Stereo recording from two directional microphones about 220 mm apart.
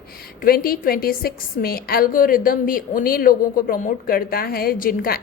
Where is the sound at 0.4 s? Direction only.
40° left (ahead or behind).